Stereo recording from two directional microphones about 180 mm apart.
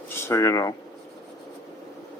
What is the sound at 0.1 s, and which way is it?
Speech, 15° left (ahead or behind).